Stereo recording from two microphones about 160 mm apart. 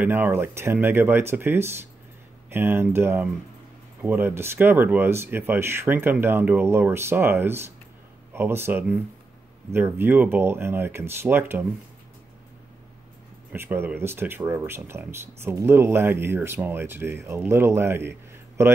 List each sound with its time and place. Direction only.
0.0 s speech: 10° right (ahead or behind)
13.5 s speech: 15° right (ahead or behind)